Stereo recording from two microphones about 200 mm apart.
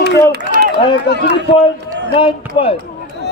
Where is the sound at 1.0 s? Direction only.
55° left (ahead or behind).